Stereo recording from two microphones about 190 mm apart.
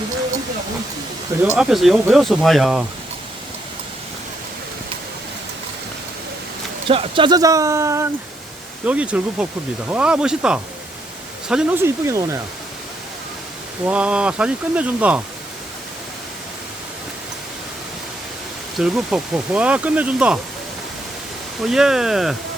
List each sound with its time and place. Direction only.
1.4 s speech: 5° right (ahead or behind)
6.8 s speech: 30° right (ahead or behind); by 11.9 s 5° right (ahead or behind)
12.0 s speech: 15° right (ahead or behind)
13.8 s speech: 5° right (ahead or behind)
18.8 s speech: 5° right (ahead or behind)
21.6 s speech: centre (ahead or behind)